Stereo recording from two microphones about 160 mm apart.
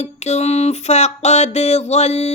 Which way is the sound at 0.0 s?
45° left (ahead or behind).